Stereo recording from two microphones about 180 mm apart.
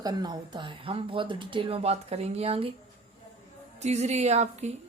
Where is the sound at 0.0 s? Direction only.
20° right (ahead or behind).